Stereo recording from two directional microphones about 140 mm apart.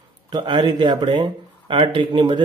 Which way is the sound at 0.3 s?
30° right (ahead or behind).